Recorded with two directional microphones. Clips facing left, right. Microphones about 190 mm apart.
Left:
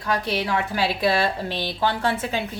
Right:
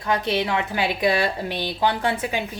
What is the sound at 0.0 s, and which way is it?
A woman's voice, 20° right (ahead or behind).